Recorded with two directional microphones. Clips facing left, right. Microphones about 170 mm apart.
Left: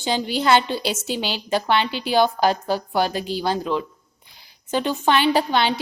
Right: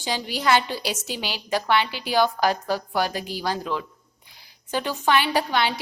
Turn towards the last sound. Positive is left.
turn(degrees=25)  # may be behind; listen again after turning